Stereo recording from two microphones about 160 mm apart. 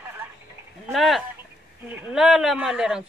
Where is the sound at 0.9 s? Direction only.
Centre (ahead or behind).